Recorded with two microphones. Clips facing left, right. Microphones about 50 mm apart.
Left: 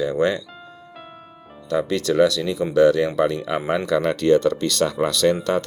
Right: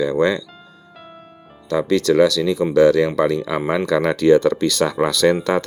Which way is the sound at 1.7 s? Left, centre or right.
Right.